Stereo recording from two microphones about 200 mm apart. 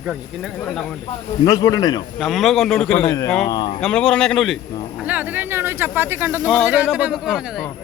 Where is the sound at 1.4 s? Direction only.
20° left (ahead or behind).